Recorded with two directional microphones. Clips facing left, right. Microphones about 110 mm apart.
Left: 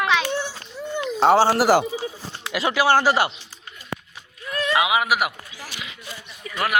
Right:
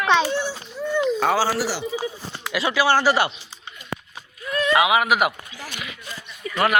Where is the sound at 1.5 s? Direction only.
50° left (ahead or behind).